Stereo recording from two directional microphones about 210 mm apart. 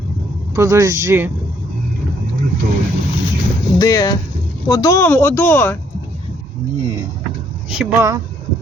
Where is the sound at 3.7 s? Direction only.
15° left (ahead or behind).